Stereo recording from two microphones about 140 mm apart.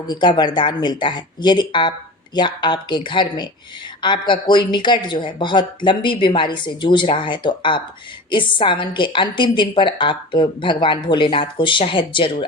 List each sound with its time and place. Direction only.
0.1 s a woman's voice: 30° left (ahead or behind)